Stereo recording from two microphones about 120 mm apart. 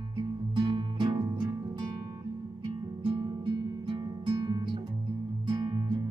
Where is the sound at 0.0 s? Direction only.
40° right (ahead or behind).